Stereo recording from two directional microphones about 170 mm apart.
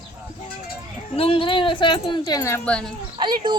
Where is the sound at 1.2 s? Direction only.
30° left (ahead or behind); by 2.9 s 5° left (ahead or behind).